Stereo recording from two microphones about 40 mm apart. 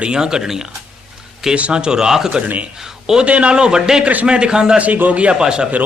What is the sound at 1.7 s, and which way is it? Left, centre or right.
Speech, right.